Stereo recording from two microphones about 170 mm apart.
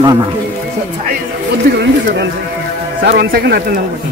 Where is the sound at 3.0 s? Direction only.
75° right (ahead or behind).